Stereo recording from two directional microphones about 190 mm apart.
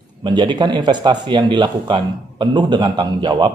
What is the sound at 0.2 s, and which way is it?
Speech, 25° right (ahead or behind).